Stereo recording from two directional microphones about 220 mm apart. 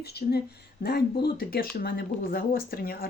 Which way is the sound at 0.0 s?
45° left (ahead or behind).